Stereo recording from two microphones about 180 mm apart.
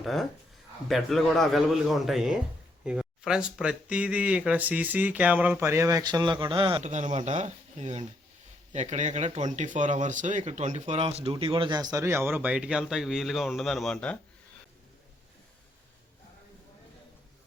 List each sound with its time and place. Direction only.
0.0 s a man's voice: centre (ahead or behind)